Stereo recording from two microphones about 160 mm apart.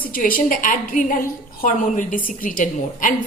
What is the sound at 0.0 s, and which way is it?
A woman's voice, 60° left (ahead or behind).